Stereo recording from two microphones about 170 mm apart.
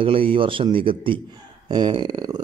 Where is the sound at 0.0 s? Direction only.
30° right (ahead or behind).